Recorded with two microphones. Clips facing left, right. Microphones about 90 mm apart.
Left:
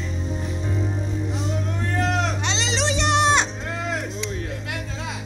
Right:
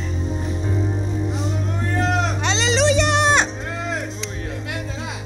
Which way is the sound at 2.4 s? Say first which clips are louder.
Right 6 dB; 50° right (ahead or behind).